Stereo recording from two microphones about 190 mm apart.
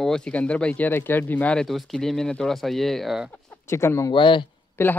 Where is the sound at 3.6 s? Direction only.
15° left (ahead or behind).